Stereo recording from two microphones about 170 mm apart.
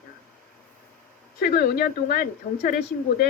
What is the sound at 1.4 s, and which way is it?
Speech, 65° left (ahead or behind).